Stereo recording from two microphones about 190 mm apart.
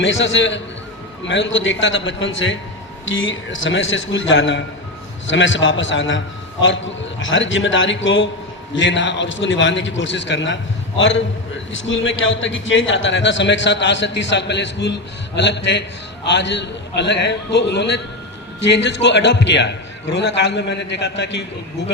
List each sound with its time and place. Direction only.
0.0 s a man's voice: 80° left; by 21.4 s 65° left (ahead or behind)